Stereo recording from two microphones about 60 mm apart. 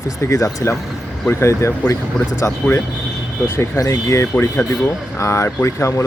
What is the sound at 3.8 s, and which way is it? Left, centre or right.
Speech, left.